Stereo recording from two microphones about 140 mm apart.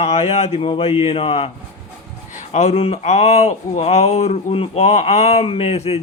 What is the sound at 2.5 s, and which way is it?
A man's voice, 50° left (ahead or behind).